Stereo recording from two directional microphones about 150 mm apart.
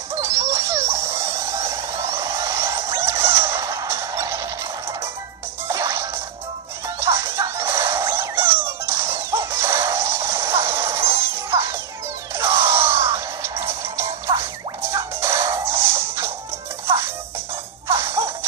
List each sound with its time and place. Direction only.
0.2 s a sound: 20° right (ahead or behind)
5.7 s music: 20° right (ahead or behind)
17.8 s music: 15° right (ahead or behind)